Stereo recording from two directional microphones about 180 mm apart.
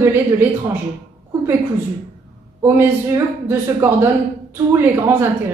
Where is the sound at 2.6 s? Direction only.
10° right (ahead or behind).